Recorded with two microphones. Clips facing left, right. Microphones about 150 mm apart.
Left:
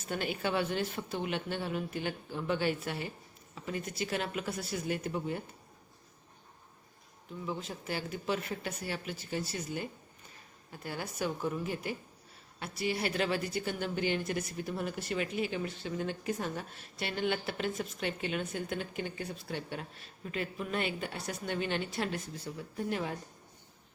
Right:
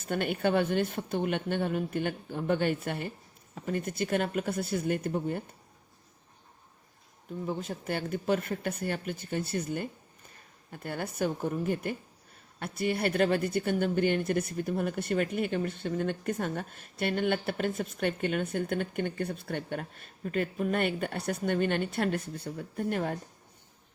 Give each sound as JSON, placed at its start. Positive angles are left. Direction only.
{"t": 0.0, "sound": "a woman's voice", "side_deg": -55}
{"t": 7.3, "sound": "a woman's voice", "side_deg": -50}